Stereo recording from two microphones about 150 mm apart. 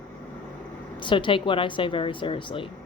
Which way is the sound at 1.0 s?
35° left (ahead or behind).